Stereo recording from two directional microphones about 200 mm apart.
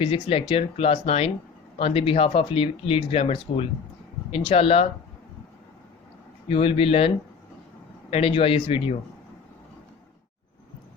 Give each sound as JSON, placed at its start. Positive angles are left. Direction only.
{"t": 0.0, "sound": "speech", "side_deg": 30}
{"t": 6.5, "sound": "speech", "side_deg": 25}
{"t": 8.1, "sound": "speech", "side_deg": 30}